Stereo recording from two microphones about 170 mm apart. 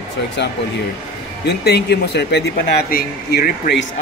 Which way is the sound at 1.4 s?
75° left (ahead or behind).